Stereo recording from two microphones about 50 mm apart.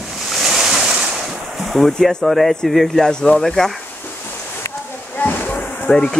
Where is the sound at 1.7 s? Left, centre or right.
Centre.